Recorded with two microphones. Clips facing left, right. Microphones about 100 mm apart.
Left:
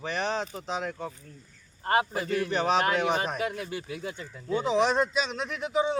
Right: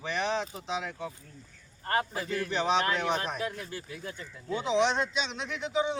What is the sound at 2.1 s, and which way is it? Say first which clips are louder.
Speech: left 3 dB; centre (ahead or behind).